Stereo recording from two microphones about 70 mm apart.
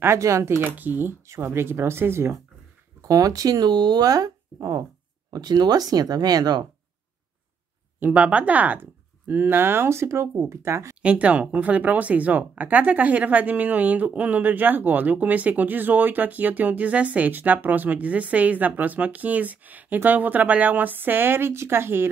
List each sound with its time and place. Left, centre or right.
0.0 s speech: right
0.7 s speech: right
1.2 s speech: right
3.0 s speech: right
5.3 s speech: right
8.0 s speech: right
11.0 s speech: centre; by 22.1 s right